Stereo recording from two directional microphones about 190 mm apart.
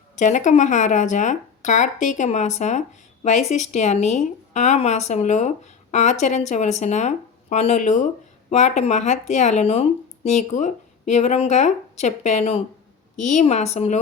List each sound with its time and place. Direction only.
0.2 s speech: 40° left (ahead or behind)